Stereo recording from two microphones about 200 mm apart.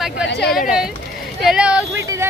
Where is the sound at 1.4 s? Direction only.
5° right (ahead or behind).